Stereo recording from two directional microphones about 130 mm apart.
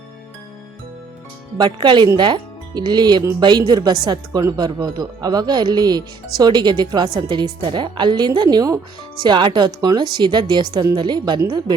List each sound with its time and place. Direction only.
1.5 s speech: 35° right (ahead or behind)